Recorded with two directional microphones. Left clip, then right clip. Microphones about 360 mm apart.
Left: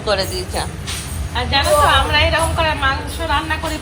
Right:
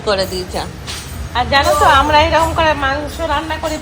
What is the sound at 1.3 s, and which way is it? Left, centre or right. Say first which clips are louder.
A woman's voice: right 3 dB; right.